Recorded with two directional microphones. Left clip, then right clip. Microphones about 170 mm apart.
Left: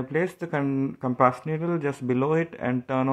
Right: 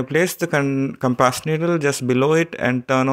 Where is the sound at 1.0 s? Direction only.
25° right (ahead or behind).